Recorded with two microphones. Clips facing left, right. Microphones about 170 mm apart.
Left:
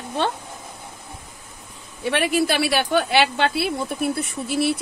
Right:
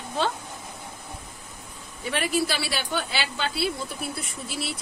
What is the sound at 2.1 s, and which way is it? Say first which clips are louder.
A woman's voice: left 5 dB; 60° left (ahead or behind).